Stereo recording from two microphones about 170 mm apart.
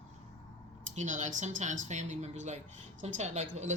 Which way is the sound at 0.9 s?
45° right (ahead or behind).